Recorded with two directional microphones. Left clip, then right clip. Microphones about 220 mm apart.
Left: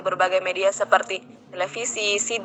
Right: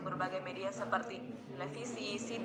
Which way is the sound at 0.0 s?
40° left (ahead or behind).